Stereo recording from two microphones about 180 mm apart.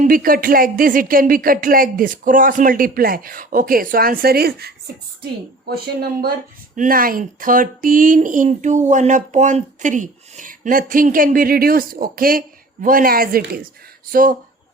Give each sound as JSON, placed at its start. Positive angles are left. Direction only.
{"t": 0.0, "sound": "speech", "side_deg": -50}